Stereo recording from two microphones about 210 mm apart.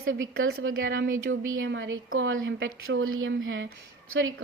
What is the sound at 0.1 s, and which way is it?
A woman's voice, 70° right (ahead or behind).